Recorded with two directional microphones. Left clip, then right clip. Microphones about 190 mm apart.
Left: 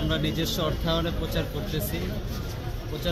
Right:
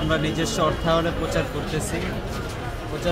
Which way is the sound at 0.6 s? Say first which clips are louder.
Right 9 dB; 5° left (ahead or behind).